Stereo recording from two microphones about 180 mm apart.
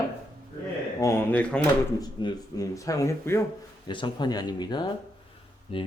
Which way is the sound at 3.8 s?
25° left (ahead or behind).